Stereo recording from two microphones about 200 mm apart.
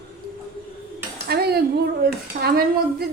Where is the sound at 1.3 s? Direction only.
55° right (ahead or behind).